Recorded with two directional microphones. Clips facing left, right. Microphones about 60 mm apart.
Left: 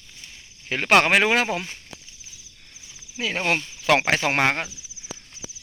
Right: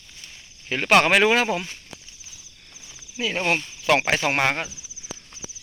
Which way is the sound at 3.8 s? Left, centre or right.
Left.